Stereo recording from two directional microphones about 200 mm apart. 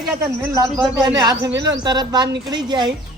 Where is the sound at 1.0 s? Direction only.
20° right (ahead or behind).